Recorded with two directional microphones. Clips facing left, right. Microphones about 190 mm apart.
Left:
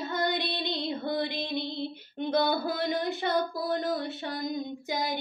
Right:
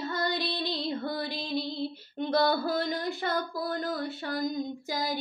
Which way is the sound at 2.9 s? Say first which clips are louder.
Left 2 dB; 20° left (ahead or behind).